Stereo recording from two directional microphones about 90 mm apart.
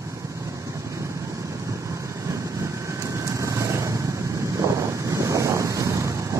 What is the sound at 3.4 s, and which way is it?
Vehicle, 35° right (ahead or behind).